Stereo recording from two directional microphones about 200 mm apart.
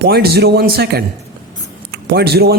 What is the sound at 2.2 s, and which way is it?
Speech, 50° right (ahead or behind).